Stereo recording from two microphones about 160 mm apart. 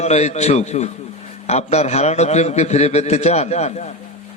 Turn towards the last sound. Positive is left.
turn(degrees=45)  # may be behind; listen again after turning